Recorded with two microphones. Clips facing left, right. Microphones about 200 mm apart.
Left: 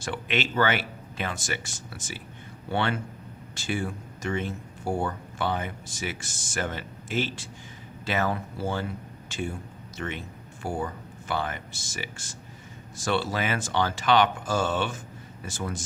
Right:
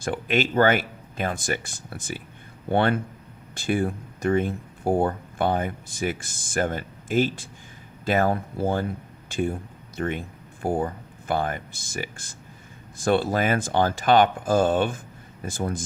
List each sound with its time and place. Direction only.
0.0 s speech: 45° right (ahead or behind)
13.1 s speech: 50° right (ahead or behind)